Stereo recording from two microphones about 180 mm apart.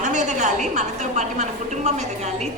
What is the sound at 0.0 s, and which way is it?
A woman's voice, 40° right (ahead or behind).